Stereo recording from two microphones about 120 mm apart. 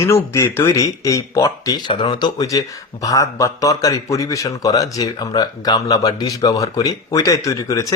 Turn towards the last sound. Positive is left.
turn(degrees=25)  # may be behind; listen again after turning